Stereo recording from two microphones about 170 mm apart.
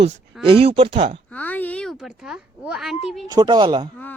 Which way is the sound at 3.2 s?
25° right (ahead or behind).